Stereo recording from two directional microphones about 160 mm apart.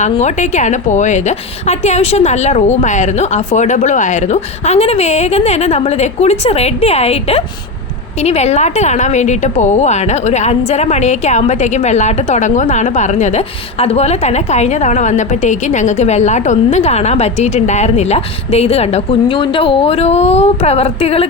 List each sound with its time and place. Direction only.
0.0 s a woman's voice: 45° left (ahead or behind)